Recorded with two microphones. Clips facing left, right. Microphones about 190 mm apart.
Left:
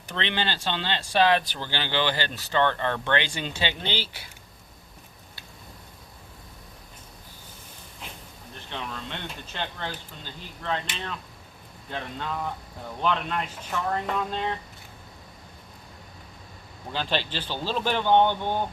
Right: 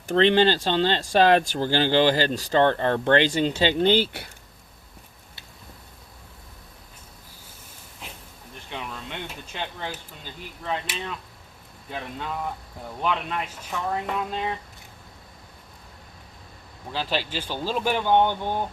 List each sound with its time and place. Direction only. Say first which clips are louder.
0.1 s speech: right 11 dB; 40° right (ahead or behind); by 4.3 s 60° right (ahead or behind)
8.7 s a sound: right 1 dB; 10° right (ahead or behind)
10.6 s speech: right 1 dB; 5° right (ahead or behind)
16.9 s speech: right 1 dB; 5° right (ahead or behind)